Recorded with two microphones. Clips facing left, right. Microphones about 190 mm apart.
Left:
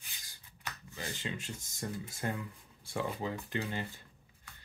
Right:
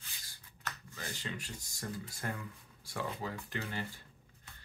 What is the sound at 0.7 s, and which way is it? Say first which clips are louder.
Speech: left 2 dB; 20° left (ahead or behind).